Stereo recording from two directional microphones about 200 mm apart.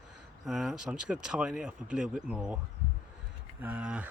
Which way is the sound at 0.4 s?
Centre (ahead or behind).